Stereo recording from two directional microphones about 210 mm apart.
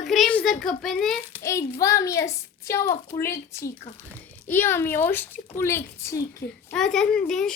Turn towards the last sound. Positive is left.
turn(degrees=0)  # may be behind; listen again after turning